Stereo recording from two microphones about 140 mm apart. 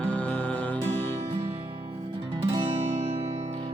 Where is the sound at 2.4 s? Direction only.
40° right (ahead or behind).